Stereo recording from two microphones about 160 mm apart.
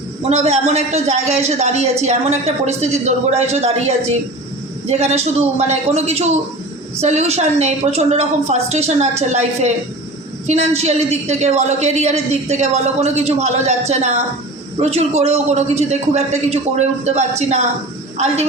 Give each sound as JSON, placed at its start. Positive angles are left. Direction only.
{"t": 0.2, "sound": "a man's voice", "side_deg": -40}